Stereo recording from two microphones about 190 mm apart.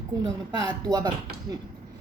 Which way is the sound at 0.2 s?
20° right (ahead or behind).